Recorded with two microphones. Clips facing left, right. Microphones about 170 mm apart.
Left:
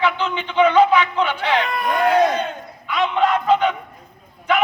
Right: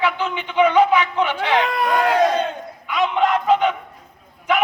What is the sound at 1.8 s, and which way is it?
Speech, 90° right.